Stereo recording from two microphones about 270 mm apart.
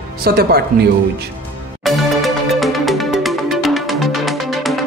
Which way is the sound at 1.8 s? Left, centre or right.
Centre.